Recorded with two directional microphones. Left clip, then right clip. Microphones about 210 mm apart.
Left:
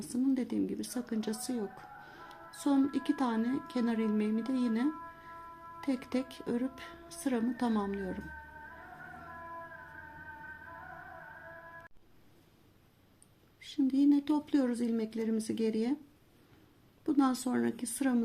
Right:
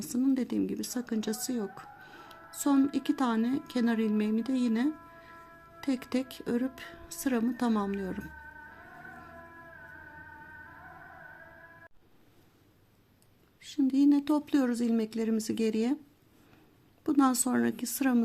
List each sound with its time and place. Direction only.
0.1 s a woman's voice: 20° right (ahead or behind)
13.6 s a woman's voice: 20° right (ahead or behind)
17.0 s a woman's voice: 25° right (ahead or behind)